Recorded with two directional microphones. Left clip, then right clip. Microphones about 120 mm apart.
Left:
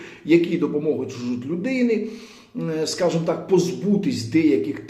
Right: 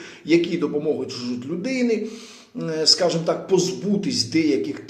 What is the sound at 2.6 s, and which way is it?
Speech, 30° left (ahead or behind).